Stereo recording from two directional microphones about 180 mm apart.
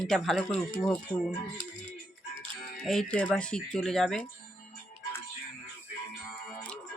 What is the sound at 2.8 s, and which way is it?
Speech, 5° left (ahead or behind).